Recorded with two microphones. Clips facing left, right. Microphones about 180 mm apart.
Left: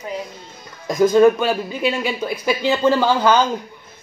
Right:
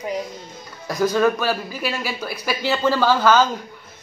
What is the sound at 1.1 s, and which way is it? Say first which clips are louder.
Speech: left 7 dB; 20° left (ahead or behind).